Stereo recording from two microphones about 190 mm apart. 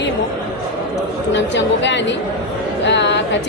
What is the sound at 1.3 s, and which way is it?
Speech, 70° left (ahead or behind).